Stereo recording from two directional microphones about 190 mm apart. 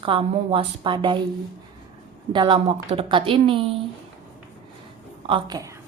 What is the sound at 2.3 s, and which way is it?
A woman's voice, 25° right (ahead or behind).